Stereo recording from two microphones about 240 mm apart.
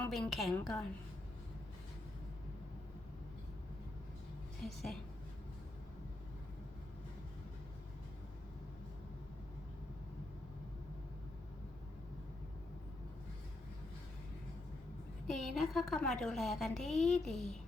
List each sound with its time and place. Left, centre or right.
0.0 s a woman's voice: centre
4.6 s a woman's voice: centre
15.3 s a woman's voice: centre